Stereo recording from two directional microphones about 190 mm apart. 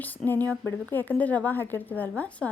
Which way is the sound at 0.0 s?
10° left (ahead or behind).